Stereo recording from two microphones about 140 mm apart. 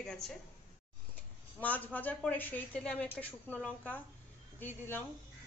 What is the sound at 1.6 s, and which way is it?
Speech, 10° left (ahead or behind).